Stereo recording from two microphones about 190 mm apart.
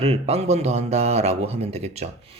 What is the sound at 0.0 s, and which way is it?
Speech, 35° right (ahead or behind).